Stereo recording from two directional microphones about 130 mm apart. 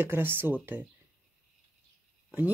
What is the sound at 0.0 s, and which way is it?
Speech, 15° right (ahead or behind).